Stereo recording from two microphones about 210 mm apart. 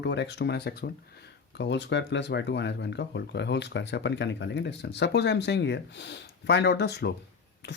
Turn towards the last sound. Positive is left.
turn(degrees=55)  # may be behind; listen again after turning